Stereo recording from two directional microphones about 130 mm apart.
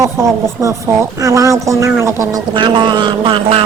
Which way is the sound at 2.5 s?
35° right (ahead or behind).